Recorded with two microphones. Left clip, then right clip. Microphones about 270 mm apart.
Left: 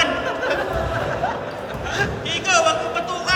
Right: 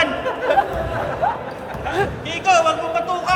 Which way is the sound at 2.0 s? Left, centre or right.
Centre.